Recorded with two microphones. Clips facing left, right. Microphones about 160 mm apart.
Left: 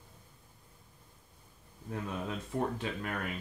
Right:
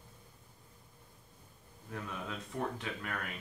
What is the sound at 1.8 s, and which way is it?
Speech, 30° left (ahead or behind).